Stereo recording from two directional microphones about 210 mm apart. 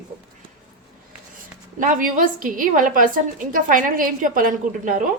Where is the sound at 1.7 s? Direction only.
40° right (ahead or behind).